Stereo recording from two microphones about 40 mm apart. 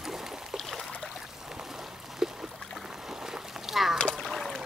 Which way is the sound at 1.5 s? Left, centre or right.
Centre.